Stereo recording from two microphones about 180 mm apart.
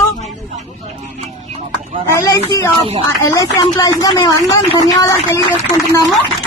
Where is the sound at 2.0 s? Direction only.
15° left (ahead or behind).